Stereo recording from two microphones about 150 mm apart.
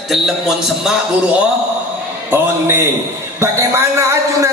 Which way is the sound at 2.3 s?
15° right (ahead or behind).